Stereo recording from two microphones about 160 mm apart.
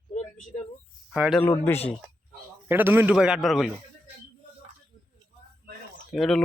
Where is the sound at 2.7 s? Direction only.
15° right (ahead or behind).